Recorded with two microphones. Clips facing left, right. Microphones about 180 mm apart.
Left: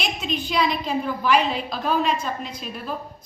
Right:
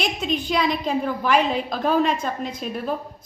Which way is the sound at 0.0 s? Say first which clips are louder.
Right 3 dB; 45° right (ahead or behind).